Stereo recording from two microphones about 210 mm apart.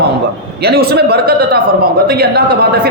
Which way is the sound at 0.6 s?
50° right (ahead or behind).